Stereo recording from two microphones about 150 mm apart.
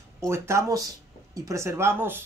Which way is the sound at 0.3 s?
20° right (ahead or behind).